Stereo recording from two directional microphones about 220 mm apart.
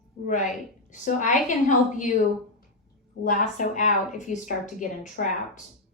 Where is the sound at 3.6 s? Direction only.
35° left (ahead or behind).